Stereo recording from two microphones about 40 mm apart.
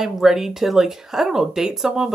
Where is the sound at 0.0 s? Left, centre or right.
Centre.